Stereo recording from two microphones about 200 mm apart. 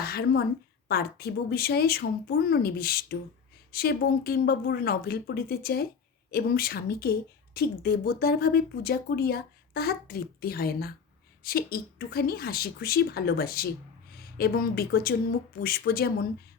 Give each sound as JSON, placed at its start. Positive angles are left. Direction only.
{"t": 0.0, "sound": "a woman's voice", "side_deg": 50}